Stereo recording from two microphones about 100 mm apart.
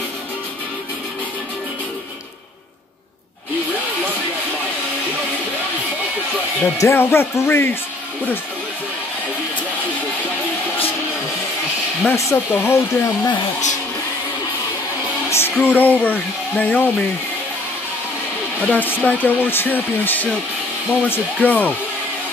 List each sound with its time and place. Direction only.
6.8 s speech: 25° left (ahead or behind)
12.1 s speech: 25° left (ahead or behind)
15.2 s music: 25° left (ahead or behind)
15.6 s speech: 15° left (ahead or behind)
18.6 s speech: 15° left (ahead or behind)